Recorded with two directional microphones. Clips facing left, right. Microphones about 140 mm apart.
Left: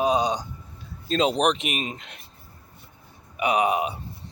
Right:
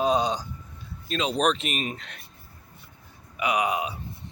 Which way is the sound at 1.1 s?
35° left (ahead or behind).